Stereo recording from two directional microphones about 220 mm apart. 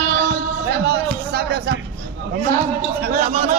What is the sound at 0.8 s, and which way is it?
Speech, 45° right (ahead or behind).